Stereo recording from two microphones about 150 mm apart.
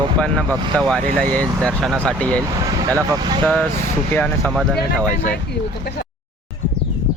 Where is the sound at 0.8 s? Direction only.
5° left (ahead or behind).